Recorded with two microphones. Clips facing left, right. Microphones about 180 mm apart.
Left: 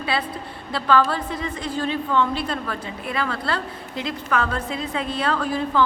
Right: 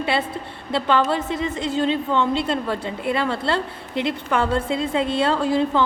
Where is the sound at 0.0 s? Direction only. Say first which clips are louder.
Right 3 dB; 25° right (ahead or behind).